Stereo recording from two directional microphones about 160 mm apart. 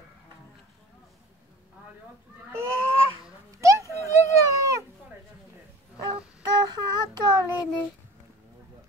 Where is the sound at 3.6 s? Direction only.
20° right (ahead or behind).